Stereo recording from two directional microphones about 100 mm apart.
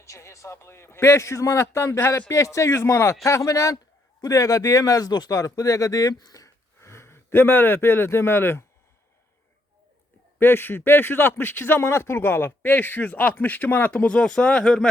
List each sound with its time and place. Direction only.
0.0 s speech: 30° left (ahead or behind)
10.4 s speech: 20° left (ahead or behind)